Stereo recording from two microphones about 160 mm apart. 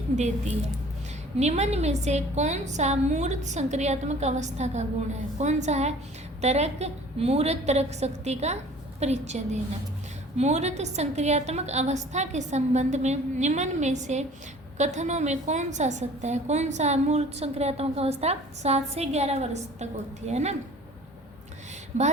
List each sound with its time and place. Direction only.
1.4 s a woman's voice: 45° right (ahead or behind)
21.9 s a woman's voice: 50° right (ahead or behind)